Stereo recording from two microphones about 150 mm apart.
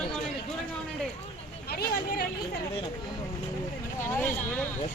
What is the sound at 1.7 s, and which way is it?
Speech, 90° left.